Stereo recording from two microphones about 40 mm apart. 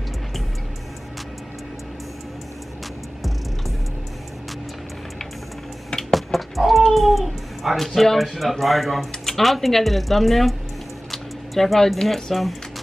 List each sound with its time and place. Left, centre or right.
5.9 s a sound: centre
6.1 s chicken: centre
6.9 s speech: centre